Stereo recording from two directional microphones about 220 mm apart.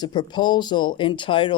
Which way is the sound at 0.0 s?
20° left (ahead or behind).